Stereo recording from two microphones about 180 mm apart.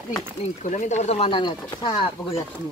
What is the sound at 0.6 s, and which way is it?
Speech, 45° left (ahead or behind).